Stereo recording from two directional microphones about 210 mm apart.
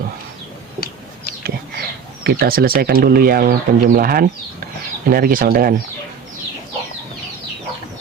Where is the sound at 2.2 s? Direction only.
45° right (ahead or behind).